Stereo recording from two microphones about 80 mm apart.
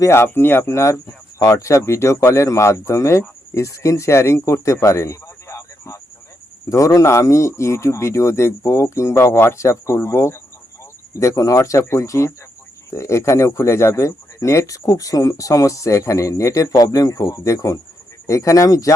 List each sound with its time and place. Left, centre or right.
0.0 s speech: left
1.4 s speech: left